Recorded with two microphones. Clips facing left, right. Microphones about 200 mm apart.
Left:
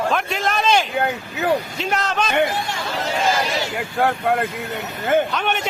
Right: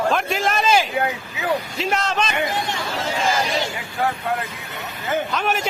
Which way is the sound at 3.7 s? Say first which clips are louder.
Left 4 dB; 55° left (ahead or behind).